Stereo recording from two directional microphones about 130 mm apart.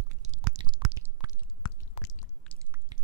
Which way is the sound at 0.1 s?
60° right (ahead or behind).